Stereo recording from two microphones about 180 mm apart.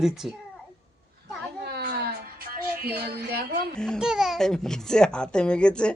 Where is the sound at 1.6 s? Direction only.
60° right (ahead or behind).